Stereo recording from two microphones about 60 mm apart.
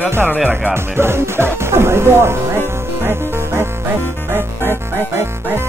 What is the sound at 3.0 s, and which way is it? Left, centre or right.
Music, right.